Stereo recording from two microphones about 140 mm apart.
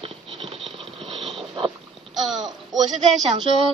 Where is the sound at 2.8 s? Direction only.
55° right (ahead or behind).